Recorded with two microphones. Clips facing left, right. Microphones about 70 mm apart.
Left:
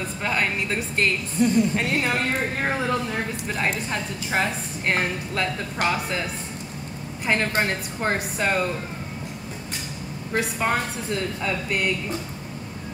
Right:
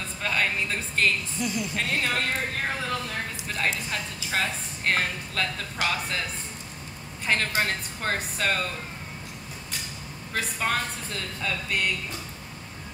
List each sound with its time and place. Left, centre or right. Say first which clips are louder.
0.2 s a woman's voice: left 1 dB; centre
1.3 s a woman's voice: left 10 dB; left
1.8 s a woman's voice: left 4 dB; centre
3.4 s a woman's voice: left 1 dB; left
7.2 s a woman's voice: left 3 dB; centre
10.3 s a woman's voice: left 4 dB; centre